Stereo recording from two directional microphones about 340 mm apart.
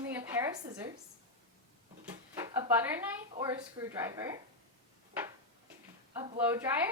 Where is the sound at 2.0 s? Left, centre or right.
Centre.